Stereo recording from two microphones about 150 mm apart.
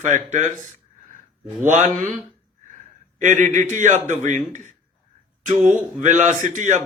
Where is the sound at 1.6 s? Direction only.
50° right (ahead or behind).